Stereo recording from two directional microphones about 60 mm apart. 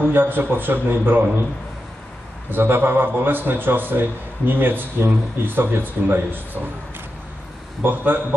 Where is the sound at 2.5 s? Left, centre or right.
Right.